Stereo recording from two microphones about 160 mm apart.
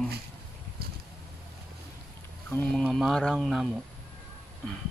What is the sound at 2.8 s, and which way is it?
Speech, centre (ahead or behind).